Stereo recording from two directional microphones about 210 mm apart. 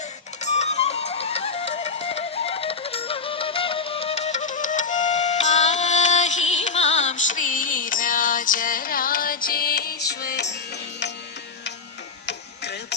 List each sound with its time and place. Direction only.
0.4 s music: 35° left (ahead or behind); by 10.5 s 50° left (ahead or behind)
12.2 s music: 55° left (ahead or behind)